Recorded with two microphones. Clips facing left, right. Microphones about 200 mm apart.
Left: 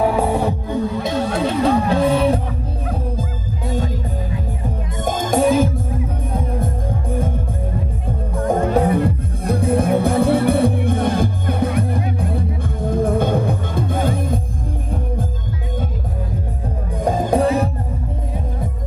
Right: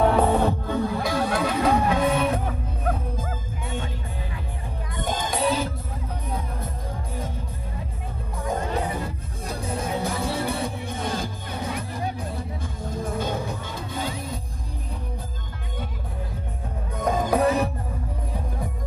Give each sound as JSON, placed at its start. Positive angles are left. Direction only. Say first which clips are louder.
{"t": 0.0, "sound": "music", "louder": "left 2 dB", "side_deg": 10}
{"t": 5.0, "sound": "music", "louder": "left 8 dB", "side_deg": 45}
{"t": 8.5, "sound": "music", "louder": "left 10 dB", "side_deg": 55}
{"t": 17.0, "sound": "music", "louder": "left 4 dB", "side_deg": 30}